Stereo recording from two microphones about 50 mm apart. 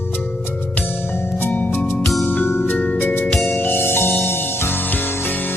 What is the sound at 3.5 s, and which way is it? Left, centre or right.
Music, left.